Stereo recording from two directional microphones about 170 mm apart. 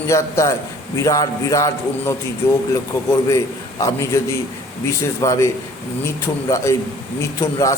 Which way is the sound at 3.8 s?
15° left (ahead or behind).